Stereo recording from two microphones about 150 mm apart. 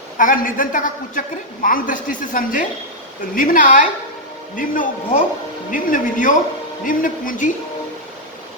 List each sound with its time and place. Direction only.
0.2 s a woman's voice: 65° left (ahead or behind)